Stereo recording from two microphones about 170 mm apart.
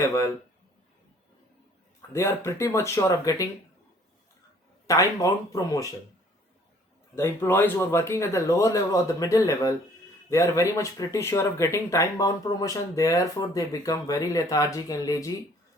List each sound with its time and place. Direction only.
0.0 s speech: 20° left (ahead or behind)
2.0 s speech: 15° left (ahead or behind)
4.9 s speech: 20° left (ahead or behind)
7.2 s speech: 15° left (ahead or behind)